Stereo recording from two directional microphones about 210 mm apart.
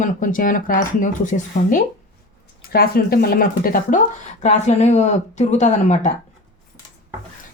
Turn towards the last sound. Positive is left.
turn(degrees=35)  # may be behind; listen again after turning